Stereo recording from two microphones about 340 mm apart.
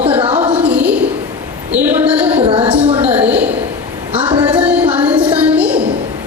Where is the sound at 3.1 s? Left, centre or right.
Centre.